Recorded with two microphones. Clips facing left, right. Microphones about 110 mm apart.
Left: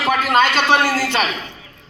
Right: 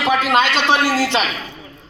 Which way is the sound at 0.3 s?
45° left (ahead or behind).